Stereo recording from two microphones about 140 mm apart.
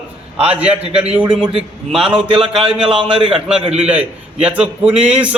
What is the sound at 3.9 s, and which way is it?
A man's voice, 10° right (ahead or behind).